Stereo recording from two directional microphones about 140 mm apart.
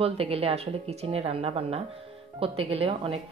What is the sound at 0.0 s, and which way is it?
Speech, 45° right (ahead or behind).